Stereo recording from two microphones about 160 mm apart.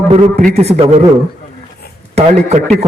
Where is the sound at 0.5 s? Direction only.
40° right (ahead or behind).